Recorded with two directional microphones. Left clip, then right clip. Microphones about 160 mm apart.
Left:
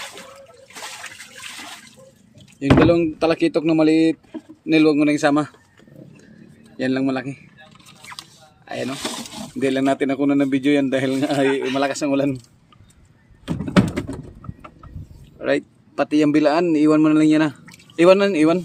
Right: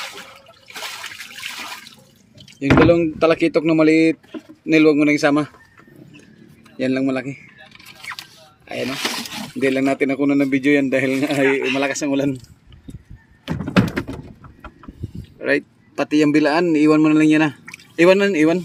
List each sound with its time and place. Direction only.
2.6 s a man's voice: 10° right (ahead or behind)
6.7 s a man's voice: 10° right (ahead or behind)
8.6 s speech: 10° right (ahead or behind)
8.9 s roaring cats: 10° left (ahead or behind)
9.6 s a man's voice: 10° right (ahead or behind)
15.4 s speech: 10° right (ahead or behind)